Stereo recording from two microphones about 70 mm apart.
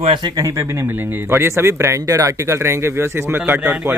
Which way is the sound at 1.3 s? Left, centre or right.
Right.